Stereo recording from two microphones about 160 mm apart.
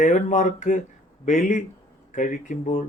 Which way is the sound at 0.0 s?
50° left (ahead or behind).